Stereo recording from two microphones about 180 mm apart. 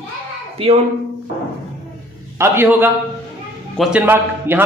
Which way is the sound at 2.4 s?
15° right (ahead or behind).